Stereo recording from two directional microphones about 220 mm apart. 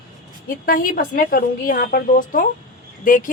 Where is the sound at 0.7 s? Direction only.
40° left (ahead or behind).